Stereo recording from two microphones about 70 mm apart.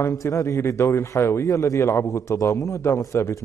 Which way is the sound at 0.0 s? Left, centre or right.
Left.